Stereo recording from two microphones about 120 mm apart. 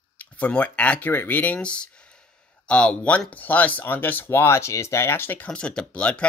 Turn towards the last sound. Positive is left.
turn(degrees=10)  # may be behind; listen again after turning